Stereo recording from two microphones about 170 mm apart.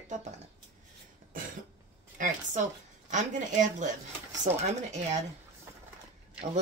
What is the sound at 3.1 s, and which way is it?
Speech, 45° right (ahead or behind).